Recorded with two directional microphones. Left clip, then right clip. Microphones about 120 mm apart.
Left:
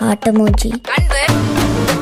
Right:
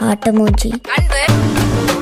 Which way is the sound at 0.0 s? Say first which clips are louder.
Even; centre (ahead or behind).